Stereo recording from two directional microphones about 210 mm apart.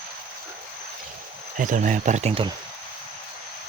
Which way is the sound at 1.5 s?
40° right (ahead or behind).